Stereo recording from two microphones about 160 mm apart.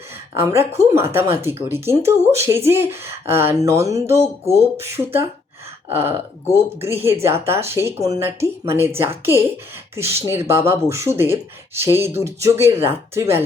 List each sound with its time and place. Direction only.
0.3 s speech: 15° right (ahead or behind)